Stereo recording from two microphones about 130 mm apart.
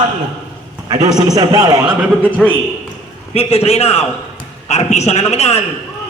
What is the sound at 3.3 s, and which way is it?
A man's voice, 50° left (ahead or behind).